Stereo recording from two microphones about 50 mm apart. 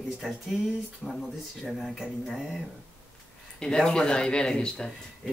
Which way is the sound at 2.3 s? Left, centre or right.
Centre.